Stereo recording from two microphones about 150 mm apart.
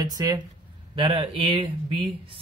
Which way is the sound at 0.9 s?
35° right (ahead or behind).